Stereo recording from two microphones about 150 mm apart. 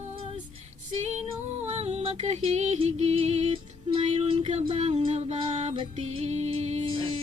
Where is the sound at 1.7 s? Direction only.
45° right (ahead or behind).